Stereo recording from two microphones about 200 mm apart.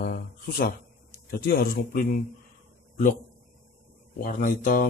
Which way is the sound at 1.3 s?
50° left (ahead or behind).